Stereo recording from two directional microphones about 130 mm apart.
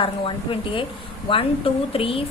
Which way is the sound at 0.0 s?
40° left (ahead or behind).